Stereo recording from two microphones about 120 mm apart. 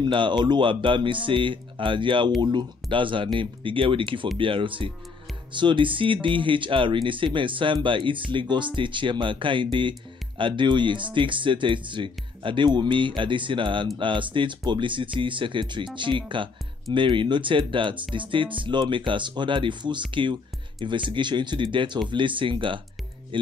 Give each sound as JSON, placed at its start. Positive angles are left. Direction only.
{"t": 0.0, "sound": "speech", "side_deg": -40}